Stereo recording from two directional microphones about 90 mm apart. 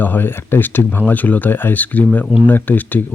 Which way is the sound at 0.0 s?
20° left (ahead or behind).